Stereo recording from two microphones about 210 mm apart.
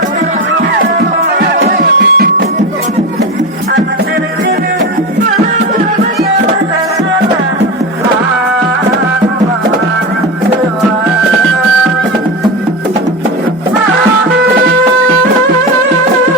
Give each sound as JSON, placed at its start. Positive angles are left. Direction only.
{"t": 1.8, "sound": "music", "side_deg": -45}